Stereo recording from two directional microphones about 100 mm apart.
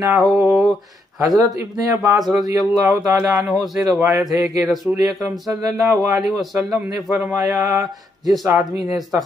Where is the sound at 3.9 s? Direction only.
35° right (ahead or behind).